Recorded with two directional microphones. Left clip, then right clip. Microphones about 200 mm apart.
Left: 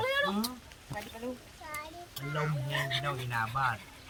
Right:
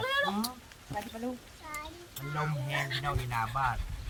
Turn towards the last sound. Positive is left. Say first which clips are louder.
# even
turn(degrees=5)  # may be behind; listen again after turning